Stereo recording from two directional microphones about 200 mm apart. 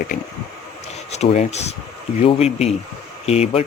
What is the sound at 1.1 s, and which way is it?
Speech, 35° left (ahead or behind).